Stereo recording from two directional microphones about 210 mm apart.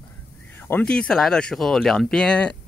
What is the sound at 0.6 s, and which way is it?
Speech, 10° left (ahead or behind).